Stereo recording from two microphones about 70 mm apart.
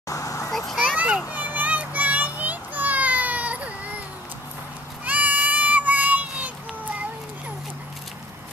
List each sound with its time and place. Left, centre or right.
0.1 s vehicle: left
0.5 s vehicle: centre
0.9 s children playing: right
5.0 s goat: right